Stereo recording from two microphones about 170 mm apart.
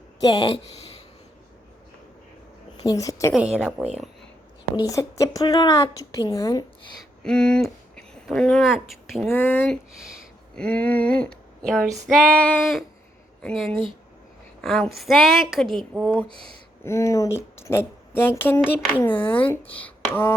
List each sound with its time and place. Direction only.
0.2 s a woman's voice: 25° left (ahead or behind)
2.8 s a woman's voice: 20° left (ahead or behind)
3.3 s a woman's voice: 5° right (ahead or behind)
4.8 s a woman's voice: 20° left (ahead or behind)
7.2 s speech: 5° left (ahead or behind)
9.3 s speech: 15° left (ahead or behind)
9.9 s speech: 5° right (ahead or behind)
12.0 s a sound: 5° left (ahead or behind)
13.4 s speech: 5° left (ahead or behind)
14.6 s a sound: centre (ahead or behind)
16.8 s speech: 15° left (ahead or behind)